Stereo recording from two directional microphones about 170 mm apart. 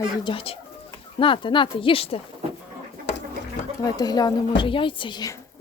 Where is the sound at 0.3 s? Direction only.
35° left (ahead or behind).